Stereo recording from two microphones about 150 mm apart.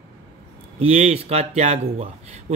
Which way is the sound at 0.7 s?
45° right (ahead or behind).